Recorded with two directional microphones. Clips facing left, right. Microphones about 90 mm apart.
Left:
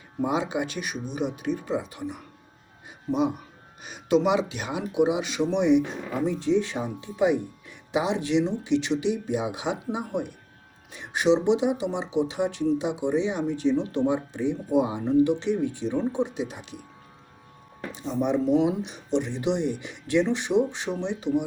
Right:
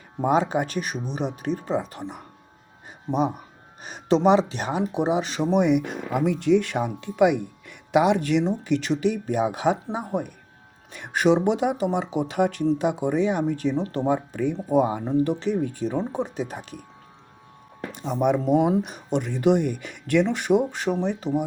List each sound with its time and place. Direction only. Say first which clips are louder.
0.2 s speech: right 4 dB; 40° right (ahead or behind)
10.9 s speech: right 2 dB; 55° right (ahead or behind)
17.9 s speech: right 3 dB; 60° right (ahead or behind); by 21.4 s 45° right (ahead or behind)